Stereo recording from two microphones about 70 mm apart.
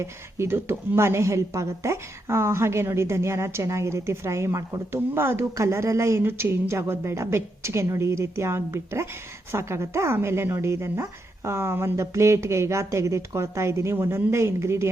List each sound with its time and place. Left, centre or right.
0.0 s a woman's voice: right